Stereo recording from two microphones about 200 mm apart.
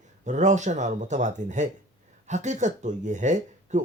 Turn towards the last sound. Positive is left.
turn(degrees=-35)  # may be behind; listen again after turning